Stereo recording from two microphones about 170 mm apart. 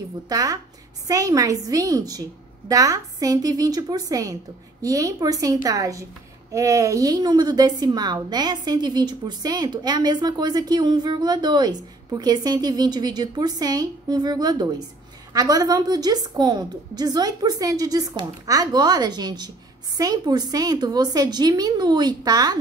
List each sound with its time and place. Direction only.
0.3 s a woman's voice: 20° right (ahead or behind)